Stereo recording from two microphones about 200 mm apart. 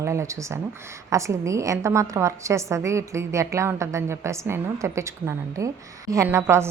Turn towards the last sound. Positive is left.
turn(degrees=-15)  # may be behind; listen again after turning